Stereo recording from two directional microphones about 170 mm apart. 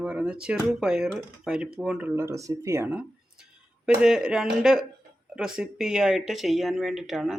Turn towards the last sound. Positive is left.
turn(degrees=0)  # may be behind; listen again after turning